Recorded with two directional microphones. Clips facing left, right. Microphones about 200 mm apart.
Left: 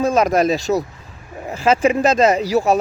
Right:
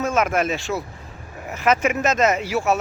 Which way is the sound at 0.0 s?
35° left (ahead or behind).